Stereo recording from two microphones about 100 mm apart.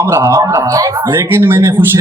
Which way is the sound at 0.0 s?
30° right (ahead or behind).